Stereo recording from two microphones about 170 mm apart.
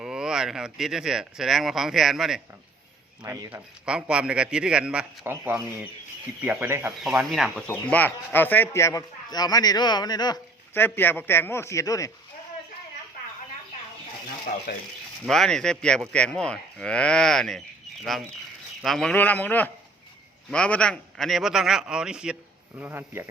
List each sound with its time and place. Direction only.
0.0 s speech: 5° right (ahead or behind)
3.2 s speech: 20° right (ahead or behind)
3.5 s a man's voice: 5° right (ahead or behind)
7.0 s speech: centre (ahead or behind)
7.7 s speech: 10° left (ahead or behind)
10.8 s speech: 10° left (ahead or behind)
14.5 s speech: 50° left (ahead or behind)
15.3 s speech: 5° left (ahead or behind)
18.8 s a man's voice: centre (ahead or behind)